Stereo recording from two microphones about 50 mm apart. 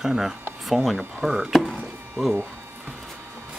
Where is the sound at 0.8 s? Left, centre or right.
Centre.